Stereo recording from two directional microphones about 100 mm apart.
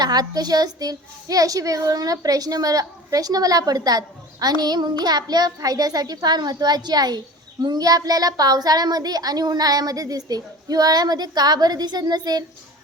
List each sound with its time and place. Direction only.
0.0 s a child's voice: 40° right (ahead or behind)